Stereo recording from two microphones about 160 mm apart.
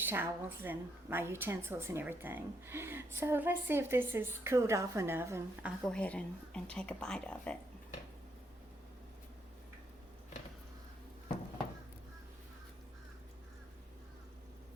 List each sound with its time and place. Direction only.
0.0 s a woman's voice: 15° right (ahead or behind)
5.8 s speech: 5° left (ahead or behind)